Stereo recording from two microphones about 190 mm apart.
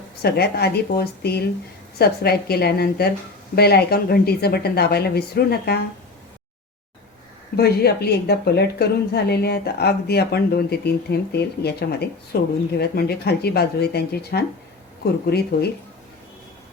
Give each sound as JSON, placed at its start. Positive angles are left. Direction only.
{"t": 0.2, "sound": "a woman's voice", "side_deg": 55}
{"t": 7.5, "sound": "a woman's voice", "side_deg": 55}